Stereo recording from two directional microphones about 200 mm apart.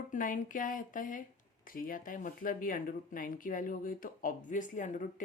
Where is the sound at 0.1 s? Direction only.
40° left (ahead or behind).